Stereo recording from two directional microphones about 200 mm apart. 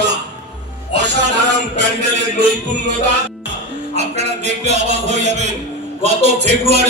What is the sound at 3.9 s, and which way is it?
A man's voice, 35° right (ahead or behind).